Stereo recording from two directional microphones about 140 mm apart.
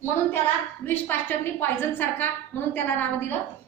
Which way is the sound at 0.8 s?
15° left (ahead or behind).